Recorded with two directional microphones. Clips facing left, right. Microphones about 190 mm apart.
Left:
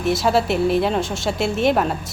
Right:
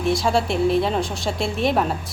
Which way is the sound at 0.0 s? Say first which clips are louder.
Left 2 dB; centre (ahead or behind).